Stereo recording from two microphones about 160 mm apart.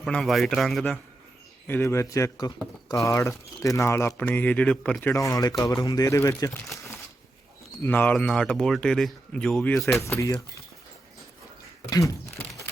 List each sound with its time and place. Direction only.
0.0 s speech: centre (ahead or behind)
1.6 s speech: 15° left (ahead or behind)
10.0 s speech: 20° left (ahead or behind)
11.9 s speech: 20° left (ahead or behind)